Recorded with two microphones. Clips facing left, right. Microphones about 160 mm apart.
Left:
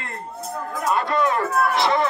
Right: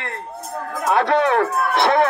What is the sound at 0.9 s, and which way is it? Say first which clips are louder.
Speech: right 4 dB; 75° right (ahead or behind).